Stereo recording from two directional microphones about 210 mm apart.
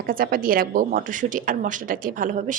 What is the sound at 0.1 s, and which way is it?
A woman's voice, 40° right (ahead or behind).